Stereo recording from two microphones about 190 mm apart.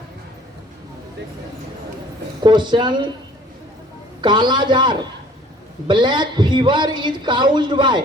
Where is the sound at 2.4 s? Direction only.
25° right (ahead or behind).